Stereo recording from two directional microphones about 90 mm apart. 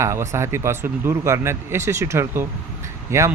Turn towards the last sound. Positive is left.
turn(degrees=-30)  # may be behind; listen again after turning